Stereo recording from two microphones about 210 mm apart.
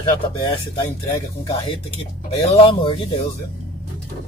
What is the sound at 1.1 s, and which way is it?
Speech, 25° left (ahead or behind).